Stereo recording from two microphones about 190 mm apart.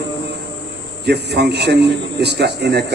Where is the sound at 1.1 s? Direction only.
60° right (ahead or behind).